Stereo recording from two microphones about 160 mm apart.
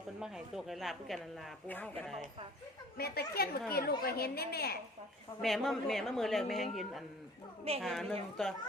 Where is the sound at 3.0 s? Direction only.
75° left (ahead or behind).